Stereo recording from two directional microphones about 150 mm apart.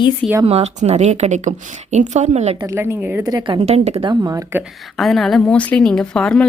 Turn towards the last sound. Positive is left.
turn(degrees=5)  # may be behind; listen again after turning